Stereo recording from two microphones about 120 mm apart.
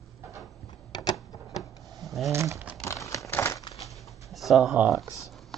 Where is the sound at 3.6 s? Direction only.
35° left (ahead or behind).